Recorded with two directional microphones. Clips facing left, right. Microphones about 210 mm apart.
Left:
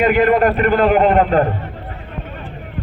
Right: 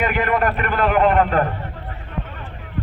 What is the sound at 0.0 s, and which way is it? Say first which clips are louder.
A man's voice: left 7 dB; 25° left (ahead or behind).